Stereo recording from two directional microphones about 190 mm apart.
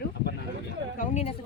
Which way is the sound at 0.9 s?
40° left (ahead or behind).